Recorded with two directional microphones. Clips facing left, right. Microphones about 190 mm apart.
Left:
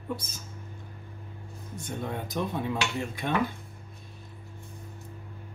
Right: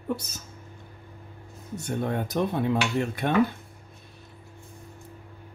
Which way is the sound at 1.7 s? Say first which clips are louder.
Right 6 dB; 70° right (ahead or behind).